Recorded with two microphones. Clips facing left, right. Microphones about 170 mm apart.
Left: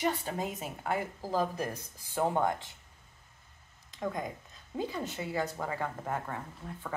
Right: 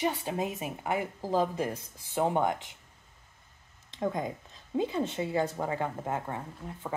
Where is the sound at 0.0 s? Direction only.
15° right (ahead or behind).